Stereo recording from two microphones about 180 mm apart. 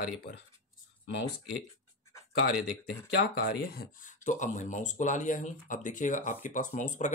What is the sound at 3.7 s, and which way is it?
Speech, 50° left (ahead or behind).